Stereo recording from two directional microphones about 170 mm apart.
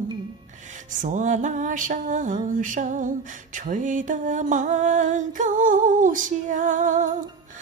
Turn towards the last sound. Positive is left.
turn(degrees=-50)  # may be behind; listen again after turning